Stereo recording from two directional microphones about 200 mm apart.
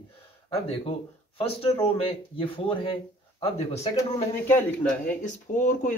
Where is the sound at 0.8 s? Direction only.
25° left (ahead or behind).